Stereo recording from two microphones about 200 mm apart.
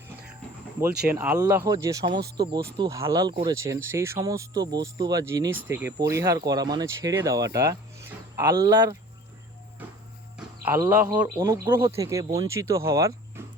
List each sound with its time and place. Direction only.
1.1 s speech: 10° right (ahead or behind)
10.8 s speech: 15° right (ahead or behind)